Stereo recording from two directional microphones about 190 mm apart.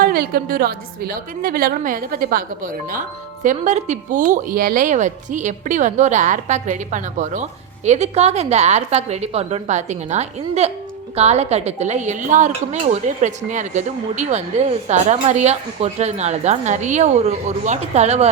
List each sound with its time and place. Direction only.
0.0 s a woman's voice: 50° right (ahead or behind)